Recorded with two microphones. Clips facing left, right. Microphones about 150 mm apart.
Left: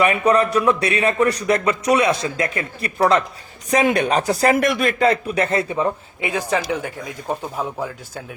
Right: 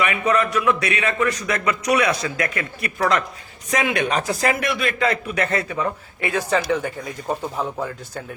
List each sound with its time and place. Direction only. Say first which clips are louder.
0.0 s a man's voice: left 4 dB; 35° left (ahead or behind)
6.2 s speech: right 1 dB; 15° left (ahead or behind)